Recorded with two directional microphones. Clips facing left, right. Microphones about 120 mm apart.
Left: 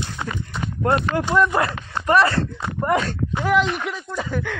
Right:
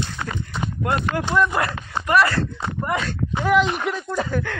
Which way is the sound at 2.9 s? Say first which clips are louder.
Left 5 dB; 40° left (ahead or behind).